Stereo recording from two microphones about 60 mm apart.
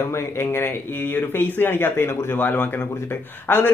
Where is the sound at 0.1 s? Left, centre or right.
Left.